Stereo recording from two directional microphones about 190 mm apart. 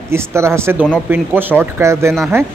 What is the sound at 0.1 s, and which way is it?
Speech, 15° right (ahead or behind).